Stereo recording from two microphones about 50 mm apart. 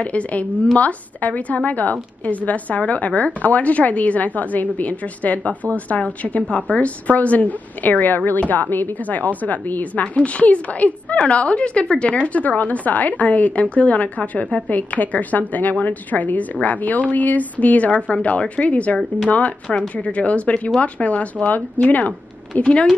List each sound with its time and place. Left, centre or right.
0.0 s a woman's voice: left
22.6 s speech: left